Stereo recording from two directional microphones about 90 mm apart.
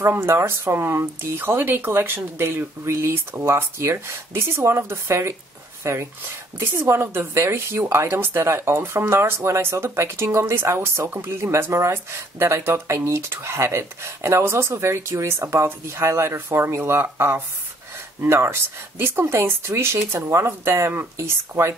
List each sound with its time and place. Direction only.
0.0 s speech: 25° right (ahead or behind)
6.6 s speech: 25° right (ahead or behind)